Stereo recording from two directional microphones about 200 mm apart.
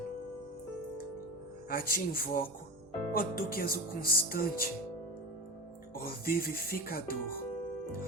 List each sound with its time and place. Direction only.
1.7 s speech: 45° left (ahead or behind)
5.9 s speech: 45° left (ahead or behind)